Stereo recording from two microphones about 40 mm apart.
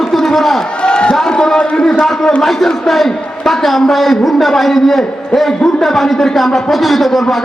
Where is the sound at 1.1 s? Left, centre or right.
Centre.